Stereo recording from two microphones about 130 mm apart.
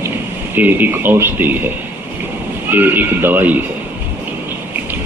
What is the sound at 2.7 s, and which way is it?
Speech, 15° right (ahead or behind).